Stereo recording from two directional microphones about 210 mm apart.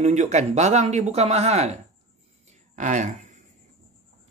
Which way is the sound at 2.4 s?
35° right (ahead or behind).